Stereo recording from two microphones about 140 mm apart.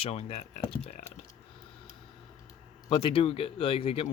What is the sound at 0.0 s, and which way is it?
Speech, 45° left (ahead or behind).